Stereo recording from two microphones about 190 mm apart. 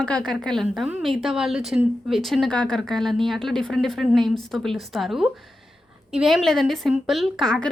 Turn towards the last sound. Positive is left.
turn(degrees=5)  # may be behind; listen again after turning